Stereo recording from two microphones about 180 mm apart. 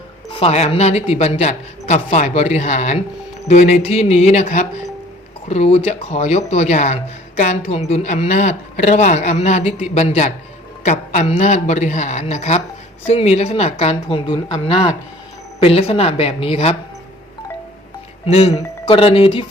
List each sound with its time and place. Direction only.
0.3 s speech: 30° left (ahead or behind)
18.3 s speech: 35° left (ahead or behind)